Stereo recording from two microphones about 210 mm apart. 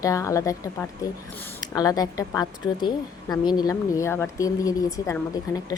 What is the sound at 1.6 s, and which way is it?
A woman's voice, 20° left (ahead or behind).